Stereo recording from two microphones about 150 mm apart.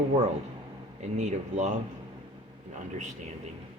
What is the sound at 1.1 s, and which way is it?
Speech, 50° right (ahead or behind).